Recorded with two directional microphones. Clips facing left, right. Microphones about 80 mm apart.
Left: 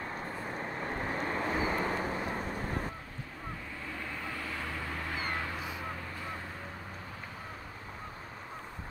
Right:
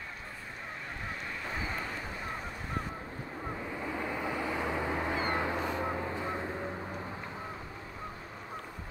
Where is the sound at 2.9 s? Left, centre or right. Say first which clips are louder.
Right 3 dB; right.